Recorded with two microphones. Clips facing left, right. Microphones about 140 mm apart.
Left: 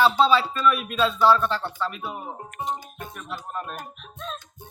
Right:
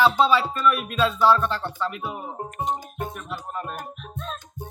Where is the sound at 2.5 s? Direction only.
45° right (ahead or behind).